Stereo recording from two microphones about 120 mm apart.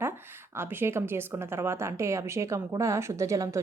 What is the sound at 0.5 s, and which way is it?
A woman's voice, 20° right (ahead or behind).